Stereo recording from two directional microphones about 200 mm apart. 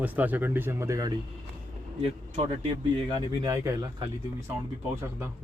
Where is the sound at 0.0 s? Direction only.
10° right (ahead or behind).